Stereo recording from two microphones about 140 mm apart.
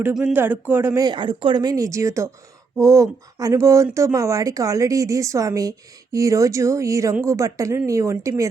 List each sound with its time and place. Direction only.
0.1 s speech: 5° right (ahead or behind)
1.0 s a woman's voice: 35° right (ahead or behind)